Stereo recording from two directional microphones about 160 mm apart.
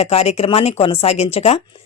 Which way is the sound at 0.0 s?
40° left (ahead or behind).